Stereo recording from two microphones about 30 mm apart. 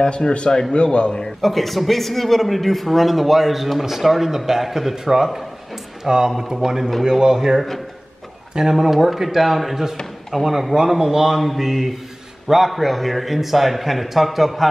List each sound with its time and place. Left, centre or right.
0.0 s a man's voice: left
1.4 s a man's voice: centre
6.3 s speech: centre
8.7 s a man's voice: centre
10.8 s speech: centre
11.3 s a man's voice: centre